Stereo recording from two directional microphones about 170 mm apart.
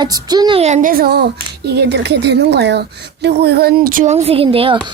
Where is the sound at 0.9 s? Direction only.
65° right (ahead or behind).